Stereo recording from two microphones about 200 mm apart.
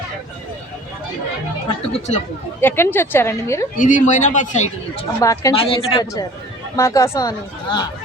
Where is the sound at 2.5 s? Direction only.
10° left (ahead or behind).